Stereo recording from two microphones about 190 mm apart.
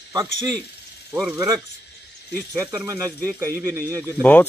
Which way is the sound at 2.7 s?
15° right (ahead or behind).